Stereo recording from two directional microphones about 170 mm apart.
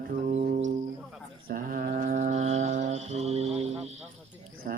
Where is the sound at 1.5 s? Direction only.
55° right (ahead or behind); by 3.7 s 40° right (ahead or behind).